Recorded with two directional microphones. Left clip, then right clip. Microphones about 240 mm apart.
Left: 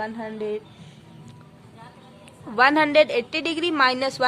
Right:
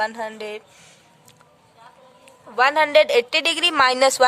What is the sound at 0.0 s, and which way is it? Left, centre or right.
Speech, right.